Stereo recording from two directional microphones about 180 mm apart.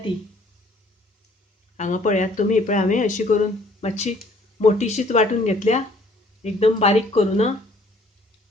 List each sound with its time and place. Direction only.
1.7 s speech: 45° left (ahead or behind)